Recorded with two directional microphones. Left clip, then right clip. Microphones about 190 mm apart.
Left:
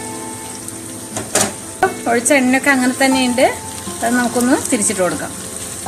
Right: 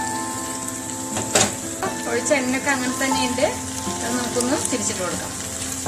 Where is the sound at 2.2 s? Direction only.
50° left (ahead or behind).